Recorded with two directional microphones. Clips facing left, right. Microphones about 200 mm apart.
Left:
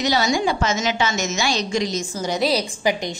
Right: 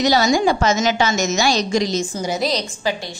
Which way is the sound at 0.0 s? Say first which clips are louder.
Right 4 dB; 40° right (ahead or behind).